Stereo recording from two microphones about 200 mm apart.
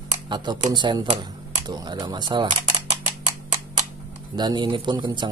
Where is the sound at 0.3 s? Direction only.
20° right (ahead or behind).